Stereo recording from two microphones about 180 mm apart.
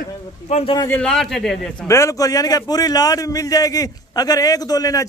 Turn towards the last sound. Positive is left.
turn(degrees=20)  # may be behind; listen again after turning